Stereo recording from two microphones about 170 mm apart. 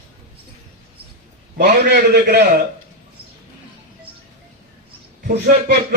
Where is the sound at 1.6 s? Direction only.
65° right (ahead or behind).